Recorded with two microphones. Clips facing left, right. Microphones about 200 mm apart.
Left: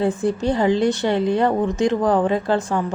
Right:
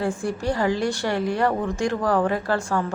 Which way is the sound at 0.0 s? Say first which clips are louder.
Left 5 dB; 20° left (ahead or behind).